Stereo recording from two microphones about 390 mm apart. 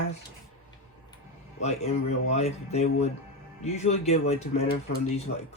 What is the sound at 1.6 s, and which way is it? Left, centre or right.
Speech, centre.